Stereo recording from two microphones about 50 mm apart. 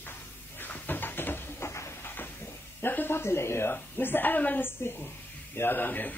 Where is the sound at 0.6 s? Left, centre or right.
Left.